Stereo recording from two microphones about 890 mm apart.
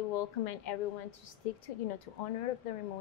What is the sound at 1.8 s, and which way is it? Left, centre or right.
Speech, left.